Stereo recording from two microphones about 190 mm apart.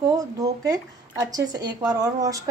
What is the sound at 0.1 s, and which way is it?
A woman's voice, 20° right (ahead or behind).